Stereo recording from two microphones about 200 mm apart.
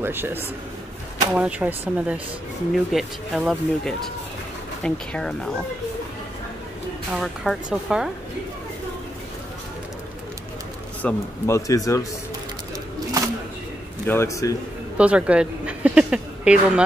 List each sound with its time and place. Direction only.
0.0 s speech: 10° right (ahead or behind)
7.1 s speech: 5° right (ahead or behind)
11.0 s a man's voice: 10° left (ahead or behind)
14.0 s a man's voice: 15° left (ahead or behind)
15.0 s speech: 5° right (ahead or behind)